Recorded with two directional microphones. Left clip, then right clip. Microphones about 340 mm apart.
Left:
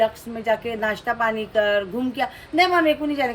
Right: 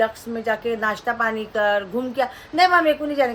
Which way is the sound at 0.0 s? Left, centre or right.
Centre.